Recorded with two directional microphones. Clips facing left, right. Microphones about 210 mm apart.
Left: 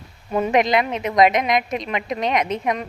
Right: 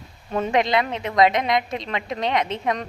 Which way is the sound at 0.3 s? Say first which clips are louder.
Left 3 dB; 10° left (ahead or behind).